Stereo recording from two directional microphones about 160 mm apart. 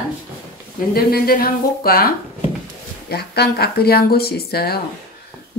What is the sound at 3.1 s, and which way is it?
A woman's voice, 85° left.